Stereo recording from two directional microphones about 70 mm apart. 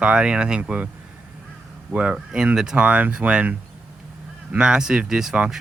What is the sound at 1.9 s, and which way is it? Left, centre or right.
Speech, centre.